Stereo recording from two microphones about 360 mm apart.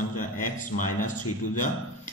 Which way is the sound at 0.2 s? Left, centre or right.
Left.